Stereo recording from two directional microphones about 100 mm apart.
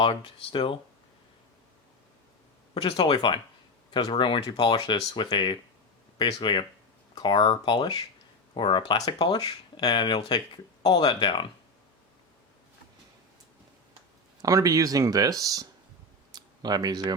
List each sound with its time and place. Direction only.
0.0 s speech: 60° left (ahead or behind)
2.7 s speech: 70° left (ahead or behind); by 4.4 s 55° left (ahead or behind)
4.4 s speech: 40° left (ahead or behind)
14.4 s speech: 35° right (ahead or behind)